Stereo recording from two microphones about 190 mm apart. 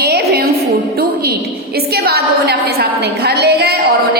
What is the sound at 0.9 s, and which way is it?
A woman's voice, 55° right (ahead or behind).